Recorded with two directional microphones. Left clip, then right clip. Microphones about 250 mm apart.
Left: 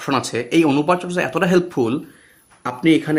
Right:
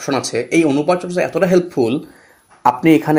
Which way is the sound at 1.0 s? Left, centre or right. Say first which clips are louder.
Right 3 dB; left.